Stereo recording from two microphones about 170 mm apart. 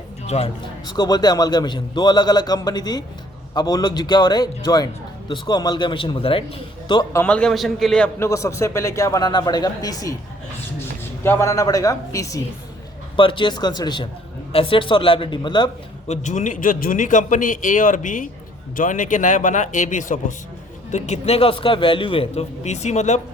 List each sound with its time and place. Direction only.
0.3 s speech: 35° left (ahead or behind)
0.9 s a man's voice: 25° left (ahead or behind)
7.2 s a man's voice: 5° left (ahead or behind)
8.3 s a man's voice: 20° left (ahead or behind)
11.2 s a man's voice: 15° left (ahead or behind)
16.0 s a man's voice: 45° left (ahead or behind)